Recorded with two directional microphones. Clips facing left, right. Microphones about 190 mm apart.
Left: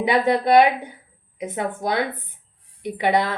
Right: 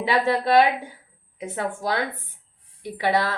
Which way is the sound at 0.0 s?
20° left (ahead or behind).